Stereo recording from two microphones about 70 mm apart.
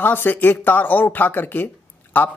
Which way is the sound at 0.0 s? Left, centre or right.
Left.